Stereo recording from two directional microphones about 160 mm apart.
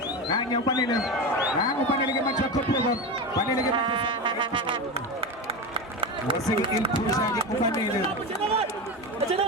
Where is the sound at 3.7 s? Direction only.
35° right (ahead or behind).